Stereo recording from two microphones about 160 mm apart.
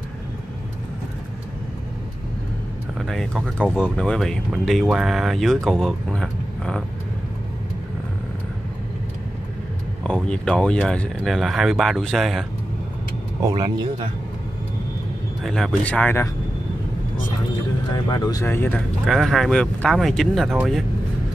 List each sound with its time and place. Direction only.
3.1 s speech: centre (ahead or behind)
10.0 s speech: 5° left (ahead or behind)
13.6 s speech: 30° right (ahead or behind)
15.4 s speech: centre (ahead or behind)
17.9 s speech: 25° left (ahead or behind)
19.0 s speech: centre (ahead or behind)